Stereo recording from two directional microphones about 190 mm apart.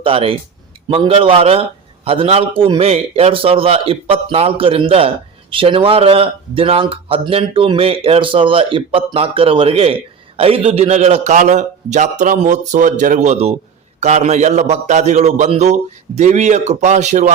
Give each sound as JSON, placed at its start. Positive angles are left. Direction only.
{"t": 0.0, "sound": "a man's voice", "side_deg": -30}